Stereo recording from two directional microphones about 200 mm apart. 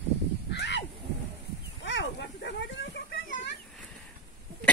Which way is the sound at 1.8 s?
60° left (ahead or behind).